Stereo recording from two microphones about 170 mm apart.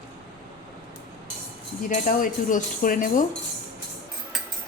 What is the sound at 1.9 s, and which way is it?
Speech, 50° left (ahead or behind).